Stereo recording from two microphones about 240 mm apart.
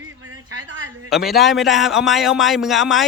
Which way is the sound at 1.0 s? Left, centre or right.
Centre.